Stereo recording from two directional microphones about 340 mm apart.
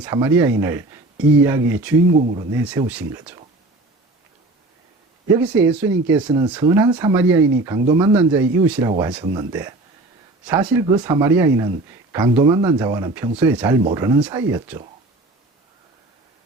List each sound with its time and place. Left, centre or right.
0.0 s speech: centre
2.1 s speech: right
2.4 s speech: centre
5.4 s speech: centre